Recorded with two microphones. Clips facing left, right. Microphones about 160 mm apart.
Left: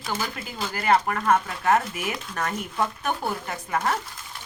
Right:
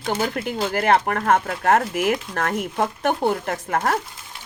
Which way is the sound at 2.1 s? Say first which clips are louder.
Right 6 dB; 65° right (ahead or behind).